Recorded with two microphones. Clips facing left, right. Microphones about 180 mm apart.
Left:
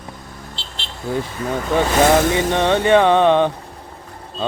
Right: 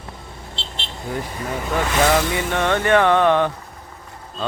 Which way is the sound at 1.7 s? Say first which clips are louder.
Left 4 dB; 25° left (ahead or behind).